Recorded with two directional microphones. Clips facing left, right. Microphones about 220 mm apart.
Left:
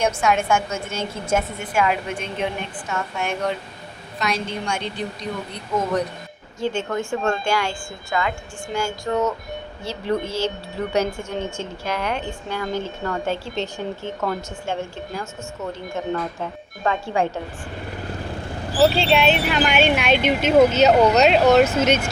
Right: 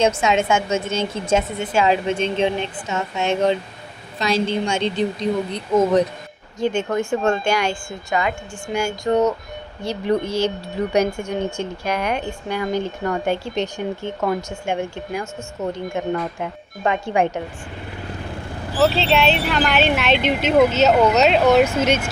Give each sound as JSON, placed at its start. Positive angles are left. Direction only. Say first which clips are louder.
{"t": 0.0, "sound": "a woman's voice", "louder": "right 3 dB", "side_deg": -20}
{"t": 18.8, "sound": "speech", "louder": "even", "side_deg": 0}
{"t": 21.8, "sound": "a woman's voice", "louder": "even", "side_deg": -10}